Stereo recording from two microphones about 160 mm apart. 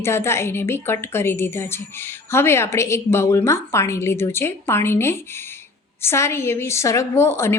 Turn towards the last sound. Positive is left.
turn(degrees=15)  # may be behind; listen again after turning